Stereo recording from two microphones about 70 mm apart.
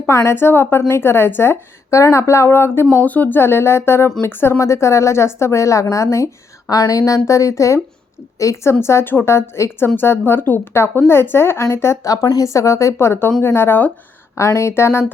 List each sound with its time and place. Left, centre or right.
0.1 s a woman's voice: left
0.3 s a woman's voice: left
6.7 s a woman's voice: left
12.0 s a woman's voice: left
14.3 s a woman's voice: left